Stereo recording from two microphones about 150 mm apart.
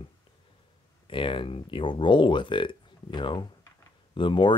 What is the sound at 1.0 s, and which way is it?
Speech, 35° left (ahead or behind).